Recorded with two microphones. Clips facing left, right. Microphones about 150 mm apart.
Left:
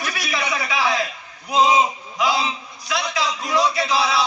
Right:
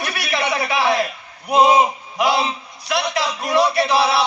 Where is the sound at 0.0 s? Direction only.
60° right (ahead or behind).